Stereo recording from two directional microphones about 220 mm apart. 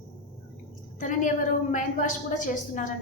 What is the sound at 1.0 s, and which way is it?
A woman's voice, 35° left (ahead or behind).